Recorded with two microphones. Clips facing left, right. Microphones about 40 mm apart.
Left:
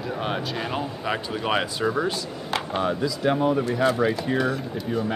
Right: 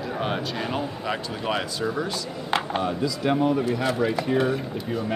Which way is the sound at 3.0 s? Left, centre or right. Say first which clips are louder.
Right 1 dB; centre.